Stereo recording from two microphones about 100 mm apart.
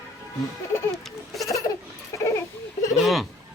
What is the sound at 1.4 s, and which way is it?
Laughter, 35° left (ahead or behind).